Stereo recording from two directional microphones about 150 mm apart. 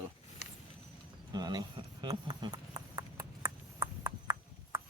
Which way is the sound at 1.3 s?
25° right (ahead or behind).